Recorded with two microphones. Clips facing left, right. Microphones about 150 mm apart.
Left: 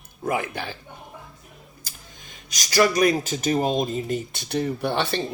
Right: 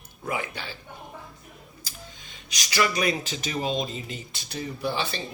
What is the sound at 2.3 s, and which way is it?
Speech, 45° left (ahead or behind).